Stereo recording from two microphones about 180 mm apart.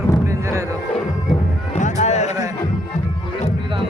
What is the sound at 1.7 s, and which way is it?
Music, 40° left (ahead or behind).